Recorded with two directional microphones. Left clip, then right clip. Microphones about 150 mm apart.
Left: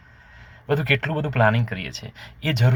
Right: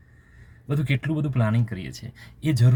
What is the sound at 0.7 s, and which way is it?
Speech, 10° right (ahead or behind).